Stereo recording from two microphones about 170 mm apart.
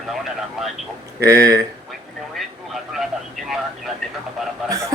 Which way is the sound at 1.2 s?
20° right (ahead or behind).